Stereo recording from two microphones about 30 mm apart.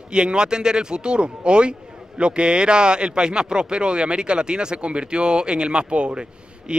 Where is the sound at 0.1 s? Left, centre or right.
Right.